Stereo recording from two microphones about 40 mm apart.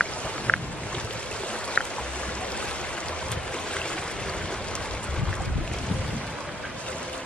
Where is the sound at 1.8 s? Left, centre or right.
Left.